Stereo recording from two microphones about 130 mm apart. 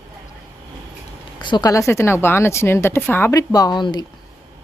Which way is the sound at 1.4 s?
30° left (ahead or behind).